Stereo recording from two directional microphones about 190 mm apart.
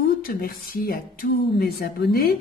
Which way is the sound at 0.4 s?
50° left (ahead or behind).